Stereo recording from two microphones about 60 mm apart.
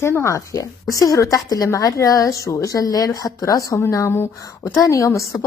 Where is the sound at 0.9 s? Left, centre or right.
Left.